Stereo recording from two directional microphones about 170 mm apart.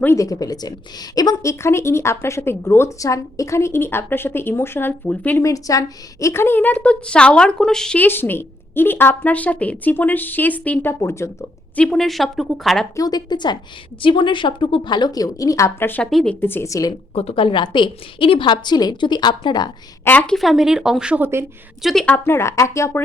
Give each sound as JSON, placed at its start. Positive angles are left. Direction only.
{"t": 0.0, "sound": "a woman's voice", "side_deg": 15}
{"t": 11.8, "sound": "speech", "side_deg": 0}
{"t": 13.0, "sound": "a woman's voice", "side_deg": 25}
{"t": 17.2, "sound": "a woman's voice", "side_deg": 35}
{"t": 20.1, "sound": "speech", "side_deg": 5}
{"t": 21.8, "sound": "speech", "side_deg": 5}